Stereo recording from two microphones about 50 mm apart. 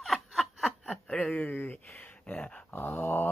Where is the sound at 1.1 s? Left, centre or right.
Left.